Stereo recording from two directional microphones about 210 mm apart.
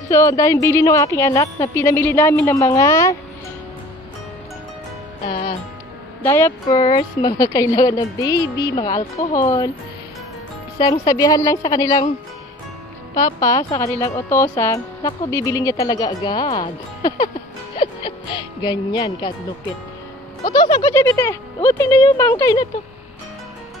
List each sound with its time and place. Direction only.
0.1 s a woman's voice: 15° left (ahead or behind)
5.3 s a woman's voice: 25° left (ahead or behind)
10.8 s a woman's voice: 20° left (ahead or behind)
13.1 s a woman's voice: 15° left (ahead or behind)
20.4 s a woman's voice: 20° left (ahead or behind)